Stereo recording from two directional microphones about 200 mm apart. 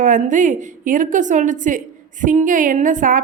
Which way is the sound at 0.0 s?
40° right (ahead or behind).